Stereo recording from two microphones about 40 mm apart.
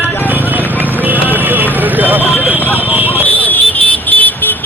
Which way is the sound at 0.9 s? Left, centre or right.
Right.